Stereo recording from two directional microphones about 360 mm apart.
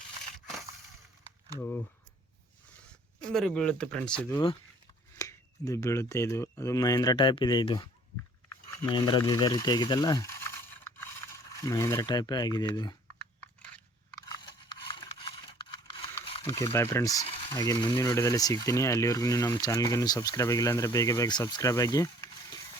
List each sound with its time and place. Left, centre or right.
3.2 s speech: centre
11.5 s speech: centre
13.4 s a sound: centre